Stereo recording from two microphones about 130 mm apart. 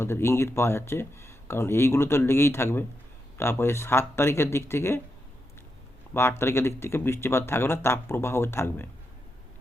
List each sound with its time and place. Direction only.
0.0 s speech: 20° left (ahead or behind)
6.1 s speech: 20° left (ahead or behind)